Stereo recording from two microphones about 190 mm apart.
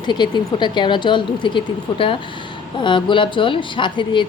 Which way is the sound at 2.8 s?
25° left (ahead or behind).